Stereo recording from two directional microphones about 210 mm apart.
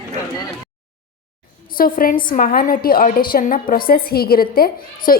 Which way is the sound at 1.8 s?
45° left (ahead or behind).